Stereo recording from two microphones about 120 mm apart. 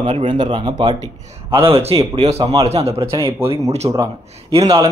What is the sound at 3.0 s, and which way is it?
Speech, 25° right (ahead or behind).